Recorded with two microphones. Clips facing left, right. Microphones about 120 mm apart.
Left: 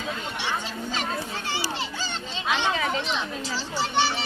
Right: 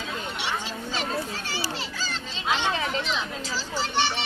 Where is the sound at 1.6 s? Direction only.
35° right (ahead or behind).